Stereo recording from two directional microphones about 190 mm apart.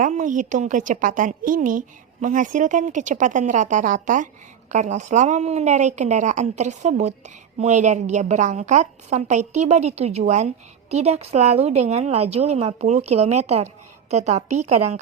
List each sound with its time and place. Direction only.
0.0 s a woman's voice: 40° right (ahead or behind)